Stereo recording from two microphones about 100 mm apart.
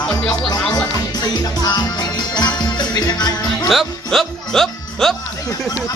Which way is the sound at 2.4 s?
45° left (ahead or behind).